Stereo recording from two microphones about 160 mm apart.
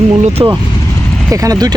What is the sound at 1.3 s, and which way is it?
Speech, 20° right (ahead or behind).